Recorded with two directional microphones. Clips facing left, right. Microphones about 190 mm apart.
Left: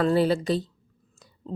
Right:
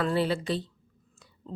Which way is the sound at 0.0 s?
40° left (ahead or behind).